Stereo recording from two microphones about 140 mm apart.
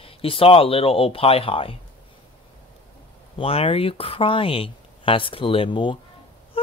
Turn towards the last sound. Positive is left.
turn(degrees=35)  # may be behind; listen again after turning